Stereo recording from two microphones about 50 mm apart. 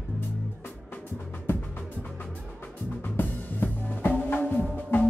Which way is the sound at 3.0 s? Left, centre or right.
Left.